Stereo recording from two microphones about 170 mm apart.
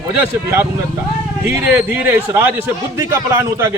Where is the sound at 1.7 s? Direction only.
15° right (ahead or behind).